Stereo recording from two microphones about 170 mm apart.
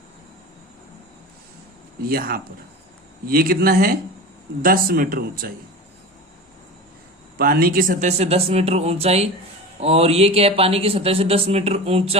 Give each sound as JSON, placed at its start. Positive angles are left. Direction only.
{"t": 2.0, "sound": "speech", "side_deg": -60}
{"t": 7.3, "sound": "speech", "side_deg": -60}